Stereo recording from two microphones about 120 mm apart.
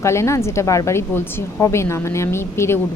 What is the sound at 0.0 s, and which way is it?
Speech, 25° left (ahead or behind).